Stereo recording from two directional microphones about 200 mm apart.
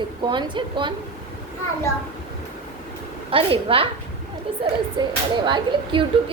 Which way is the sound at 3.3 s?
25° right (ahead or behind).